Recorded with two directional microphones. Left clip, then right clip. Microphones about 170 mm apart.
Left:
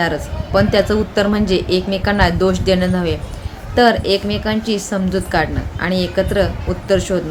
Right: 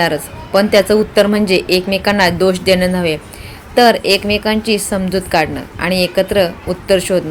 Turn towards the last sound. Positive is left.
turn(degrees=-15)  # may be behind; listen again after turning